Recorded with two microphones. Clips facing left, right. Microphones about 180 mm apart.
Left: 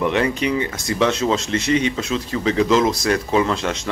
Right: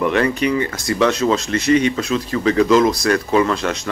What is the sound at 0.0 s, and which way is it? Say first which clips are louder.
Speech: right 2 dB; 20° left (ahead or behind).